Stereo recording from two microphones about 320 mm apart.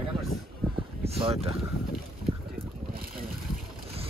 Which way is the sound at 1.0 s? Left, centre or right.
Centre.